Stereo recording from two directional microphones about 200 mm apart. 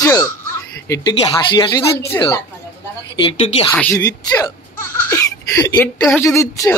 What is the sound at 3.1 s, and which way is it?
Speech, 25° left (ahead or behind).